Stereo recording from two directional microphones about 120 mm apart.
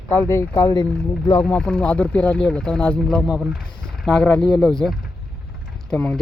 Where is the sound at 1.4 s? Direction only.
5° left (ahead or behind).